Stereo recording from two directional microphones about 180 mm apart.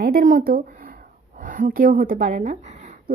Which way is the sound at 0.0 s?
55° right (ahead or behind).